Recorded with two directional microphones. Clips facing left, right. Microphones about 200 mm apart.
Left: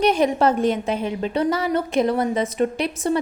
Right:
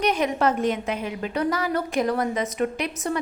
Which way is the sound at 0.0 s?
30° left (ahead or behind).